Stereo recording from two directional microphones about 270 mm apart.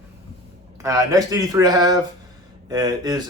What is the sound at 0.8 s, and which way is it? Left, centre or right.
Speech, centre.